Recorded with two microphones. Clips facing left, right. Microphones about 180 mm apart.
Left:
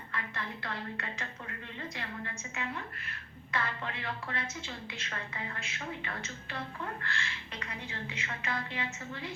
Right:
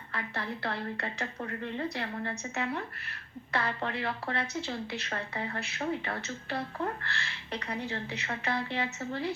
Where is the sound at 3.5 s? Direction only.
35° right (ahead or behind).